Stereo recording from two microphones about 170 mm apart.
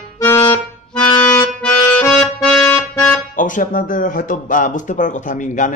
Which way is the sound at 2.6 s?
15° left (ahead or behind).